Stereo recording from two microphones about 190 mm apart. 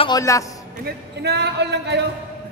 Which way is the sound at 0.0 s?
20° left (ahead or behind).